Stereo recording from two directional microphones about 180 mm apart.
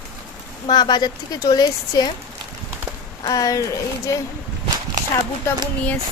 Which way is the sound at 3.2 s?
20° left (ahead or behind).